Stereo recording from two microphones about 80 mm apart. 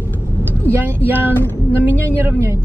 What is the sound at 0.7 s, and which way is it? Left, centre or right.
Speech, right.